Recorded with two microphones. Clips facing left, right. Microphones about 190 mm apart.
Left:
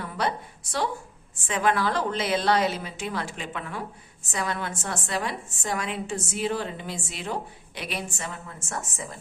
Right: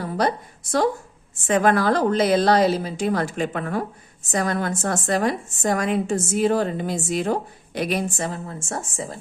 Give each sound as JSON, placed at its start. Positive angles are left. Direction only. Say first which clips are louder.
{"t": 0.0, "sound": "a woman's voice", "louder": "right 6 dB", "side_deg": -40}